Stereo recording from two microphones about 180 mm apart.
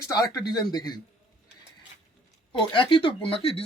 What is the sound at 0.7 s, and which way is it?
Speech, 20° left (ahead or behind).